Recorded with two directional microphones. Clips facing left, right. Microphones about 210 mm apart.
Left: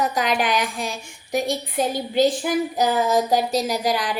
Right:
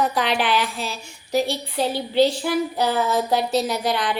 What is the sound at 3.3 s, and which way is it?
Speech, 40° left (ahead or behind).